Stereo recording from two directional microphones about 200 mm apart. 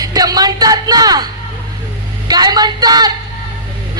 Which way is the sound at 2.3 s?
20° right (ahead or behind).